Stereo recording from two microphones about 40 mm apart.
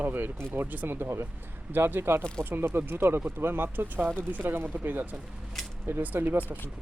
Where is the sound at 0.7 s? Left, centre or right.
Right.